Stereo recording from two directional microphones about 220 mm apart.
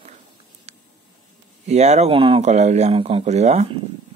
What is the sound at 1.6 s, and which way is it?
Speech, 30° right (ahead or behind).